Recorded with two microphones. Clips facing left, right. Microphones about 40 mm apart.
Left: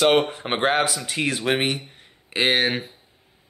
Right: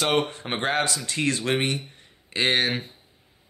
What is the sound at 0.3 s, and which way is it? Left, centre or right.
A man's voice, centre.